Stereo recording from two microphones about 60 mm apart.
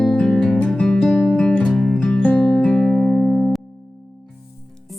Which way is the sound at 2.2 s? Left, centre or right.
Left.